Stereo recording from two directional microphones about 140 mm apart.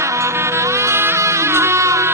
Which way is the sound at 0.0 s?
20° right (ahead or behind).